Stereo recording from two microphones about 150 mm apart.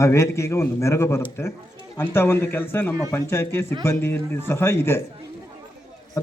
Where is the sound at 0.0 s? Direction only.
20° left (ahead or behind).